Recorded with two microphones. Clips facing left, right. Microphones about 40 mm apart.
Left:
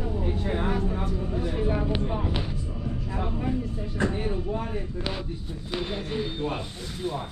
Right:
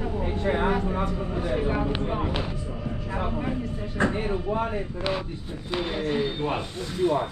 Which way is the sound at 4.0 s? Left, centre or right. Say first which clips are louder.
Right 3 dB; right.